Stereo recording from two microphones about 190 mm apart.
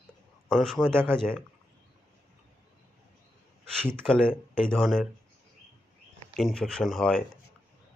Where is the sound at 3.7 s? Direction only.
5° left (ahead or behind).